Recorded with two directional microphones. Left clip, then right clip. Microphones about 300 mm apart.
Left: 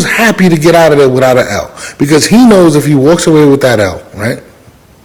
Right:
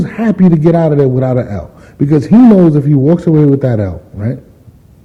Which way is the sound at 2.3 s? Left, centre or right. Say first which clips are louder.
Left 1 dB; left.